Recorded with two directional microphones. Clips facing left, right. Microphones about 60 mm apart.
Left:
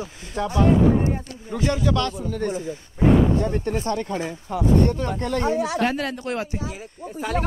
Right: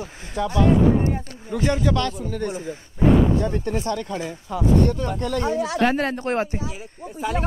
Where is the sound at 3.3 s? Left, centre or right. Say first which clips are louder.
Even; left.